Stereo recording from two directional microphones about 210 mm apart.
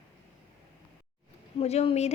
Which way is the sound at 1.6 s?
30° left (ahead or behind).